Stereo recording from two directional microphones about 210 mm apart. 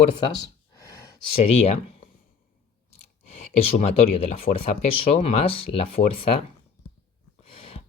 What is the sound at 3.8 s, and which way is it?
Speech, 30° left (ahead or behind).